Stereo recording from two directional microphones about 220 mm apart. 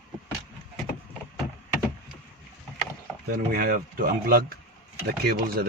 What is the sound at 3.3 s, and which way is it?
Speech, 40° right (ahead or behind).